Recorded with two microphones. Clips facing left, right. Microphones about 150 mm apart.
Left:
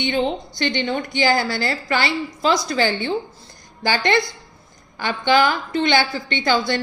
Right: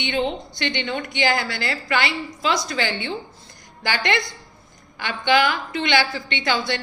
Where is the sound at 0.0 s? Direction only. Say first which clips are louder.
Left 3 dB; 35° left (ahead or behind).